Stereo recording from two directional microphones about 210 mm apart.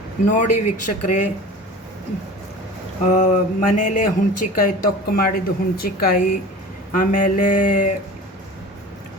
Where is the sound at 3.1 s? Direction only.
35° left (ahead or behind).